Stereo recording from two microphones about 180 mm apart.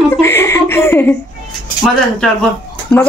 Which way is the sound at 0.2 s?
15° left (ahead or behind).